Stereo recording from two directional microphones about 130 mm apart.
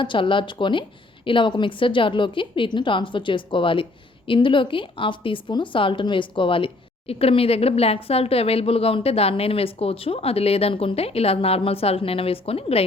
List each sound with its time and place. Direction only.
0.0 s a woman's voice: 40° left (ahead or behind)